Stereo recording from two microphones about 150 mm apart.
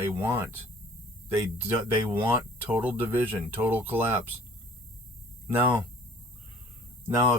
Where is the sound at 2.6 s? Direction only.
10° right (ahead or behind).